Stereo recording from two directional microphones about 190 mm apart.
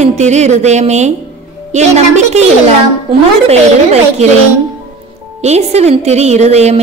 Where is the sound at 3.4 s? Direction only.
35° right (ahead or behind).